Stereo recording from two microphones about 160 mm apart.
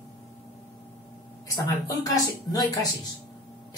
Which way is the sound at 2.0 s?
20° left (ahead or behind).